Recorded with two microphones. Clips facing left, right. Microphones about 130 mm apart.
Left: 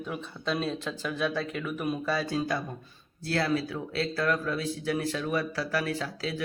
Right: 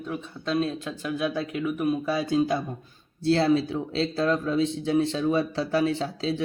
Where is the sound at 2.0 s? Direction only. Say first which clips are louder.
Right 4 dB; 20° right (ahead or behind).